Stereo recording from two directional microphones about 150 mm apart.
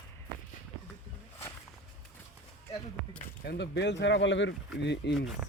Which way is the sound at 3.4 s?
90° left.